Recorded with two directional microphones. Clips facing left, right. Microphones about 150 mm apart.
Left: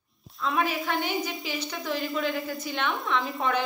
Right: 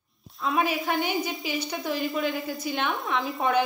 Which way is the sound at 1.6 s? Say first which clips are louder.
Right 2 dB; 20° right (ahead or behind).